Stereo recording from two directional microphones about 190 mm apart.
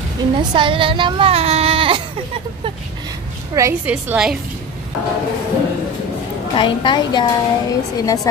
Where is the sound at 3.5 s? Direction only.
15° right (ahead or behind).